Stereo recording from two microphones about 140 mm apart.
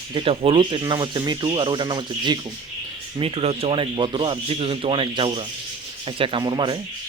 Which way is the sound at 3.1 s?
45° right (ahead or behind).